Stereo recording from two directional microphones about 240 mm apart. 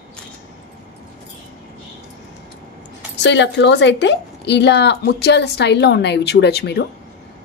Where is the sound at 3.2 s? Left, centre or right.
Left.